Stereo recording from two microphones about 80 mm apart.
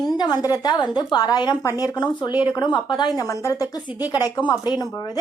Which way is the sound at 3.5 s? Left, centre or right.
Left.